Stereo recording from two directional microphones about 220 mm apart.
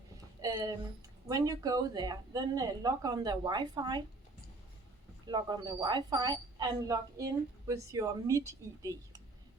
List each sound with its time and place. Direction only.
0.4 s a woman's voice: 15° right (ahead or behind)
5.2 s a woman's voice: 20° right (ahead or behind)